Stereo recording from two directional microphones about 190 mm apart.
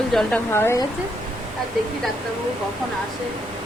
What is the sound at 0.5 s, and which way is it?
Speech, 15° left (ahead or behind).